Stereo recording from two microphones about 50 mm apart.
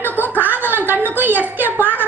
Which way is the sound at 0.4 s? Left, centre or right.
Right.